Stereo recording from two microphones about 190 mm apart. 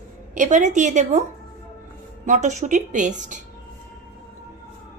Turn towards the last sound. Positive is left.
turn(degrees=-40)  # may be behind; listen again after turning